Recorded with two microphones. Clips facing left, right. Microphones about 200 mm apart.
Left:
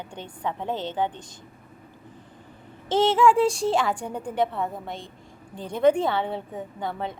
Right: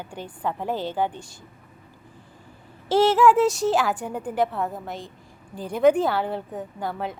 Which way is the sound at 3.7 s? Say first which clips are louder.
Right 1 dB; 5° right (ahead or behind).